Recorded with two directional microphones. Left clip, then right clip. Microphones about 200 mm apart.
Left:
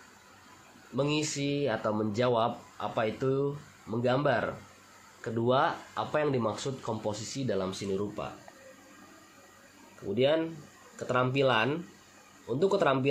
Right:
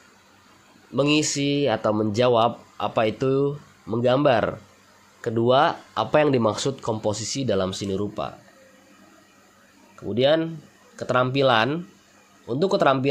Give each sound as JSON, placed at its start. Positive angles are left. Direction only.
{"t": 0.9, "sound": "speech", "side_deg": -35}
{"t": 10.1, "sound": "speech", "side_deg": -45}